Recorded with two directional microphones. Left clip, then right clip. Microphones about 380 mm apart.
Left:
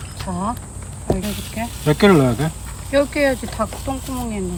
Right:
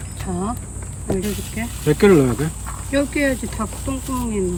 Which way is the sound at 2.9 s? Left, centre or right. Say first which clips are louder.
Left 3 dB; centre.